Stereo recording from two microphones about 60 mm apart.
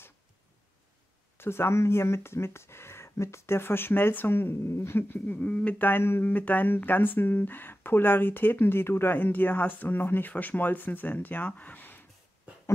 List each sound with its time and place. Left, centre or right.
1.4 s speech: left
5.2 s speech: left
5.9 s speech: left